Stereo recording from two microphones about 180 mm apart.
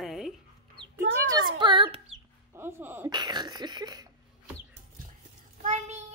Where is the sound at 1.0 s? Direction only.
90° right.